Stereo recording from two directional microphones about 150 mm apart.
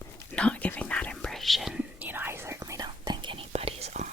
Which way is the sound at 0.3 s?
10° left (ahead or behind).